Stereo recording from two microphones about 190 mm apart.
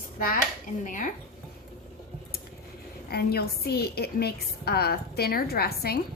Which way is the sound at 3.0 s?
55° left (ahead or behind).